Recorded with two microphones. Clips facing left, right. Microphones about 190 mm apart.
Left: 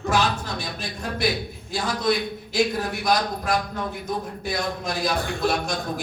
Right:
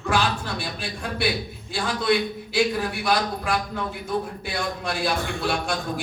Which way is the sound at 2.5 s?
40° left (ahead or behind).